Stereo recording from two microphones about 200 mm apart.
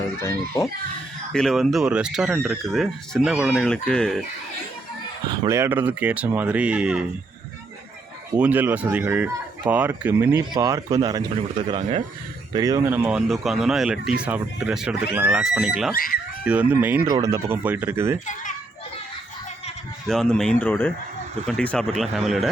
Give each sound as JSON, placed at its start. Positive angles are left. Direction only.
{"t": 0.2, "sound": "a child's voice", "side_deg": 15}
{"t": 1.3, "sound": "speech", "side_deg": 5}
{"t": 5.3, "sound": "speech", "side_deg": -15}
{"t": 8.4, "sound": "speech", "side_deg": -10}
{"t": 11.8, "sound": "speech", "side_deg": -35}
{"t": 12.5, "sound": "speech", "side_deg": -20}
{"t": 20.1, "sound": "speech", "side_deg": 5}